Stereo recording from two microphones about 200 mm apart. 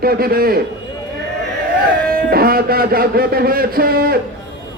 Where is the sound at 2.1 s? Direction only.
50° right (ahead or behind).